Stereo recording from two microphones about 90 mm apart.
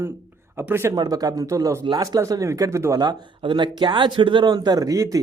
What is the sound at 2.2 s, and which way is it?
Speech, 35° right (ahead or behind).